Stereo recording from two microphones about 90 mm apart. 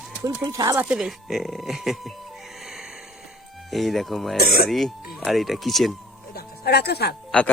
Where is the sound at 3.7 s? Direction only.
Centre (ahead or behind).